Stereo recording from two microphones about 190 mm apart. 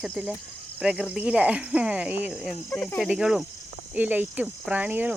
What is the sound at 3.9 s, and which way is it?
Cricket, 10° right (ahead or behind).